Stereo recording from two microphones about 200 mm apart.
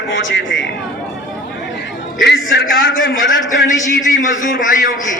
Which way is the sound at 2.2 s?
55° left (ahead or behind).